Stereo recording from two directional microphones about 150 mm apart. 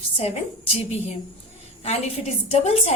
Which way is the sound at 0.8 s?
45° left (ahead or behind).